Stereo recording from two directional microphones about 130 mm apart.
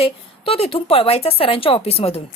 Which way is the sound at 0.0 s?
45° left (ahead or behind).